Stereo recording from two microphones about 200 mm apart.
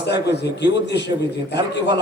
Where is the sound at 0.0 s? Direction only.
55° left (ahead or behind).